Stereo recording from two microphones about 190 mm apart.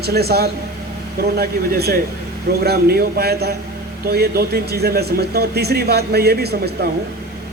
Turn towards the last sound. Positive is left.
turn(degrees=-55)  # may be behind; listen again after turning